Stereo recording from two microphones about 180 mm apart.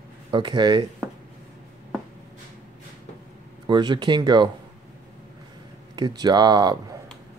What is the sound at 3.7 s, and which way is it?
Speech, 25° right (ahead or behind).